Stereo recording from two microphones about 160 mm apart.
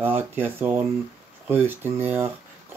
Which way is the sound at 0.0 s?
15° right (ahead or behind).